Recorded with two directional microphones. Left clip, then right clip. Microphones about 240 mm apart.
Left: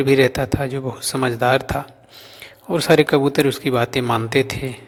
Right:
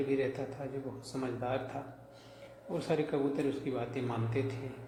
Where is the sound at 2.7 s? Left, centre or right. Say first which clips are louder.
Left 19 dB; left.